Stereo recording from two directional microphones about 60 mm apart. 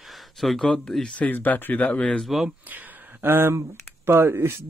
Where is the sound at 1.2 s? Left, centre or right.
Left.